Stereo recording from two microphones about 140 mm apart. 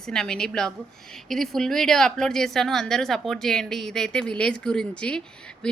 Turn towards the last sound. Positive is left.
turn(degrees=5)  # may be behind; listen again after turning